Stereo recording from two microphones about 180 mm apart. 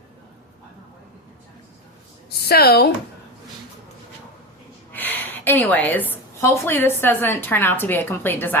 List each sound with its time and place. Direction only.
2.4 s a woman's voice: 60° left (ahead or behind)
4.9 s a woman's voice: 10° left (ahead or behind)